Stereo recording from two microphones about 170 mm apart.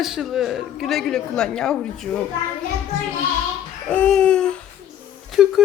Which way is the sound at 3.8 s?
5° left (ahead or behind).